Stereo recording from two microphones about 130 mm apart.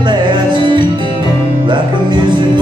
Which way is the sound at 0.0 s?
35° right (ahead or behind).